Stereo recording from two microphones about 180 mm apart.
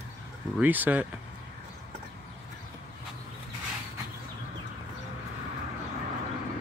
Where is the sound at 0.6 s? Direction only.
10° right (ahead or behind).